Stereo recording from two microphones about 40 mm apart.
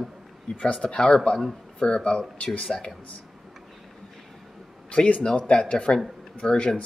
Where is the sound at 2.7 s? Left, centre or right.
Centre.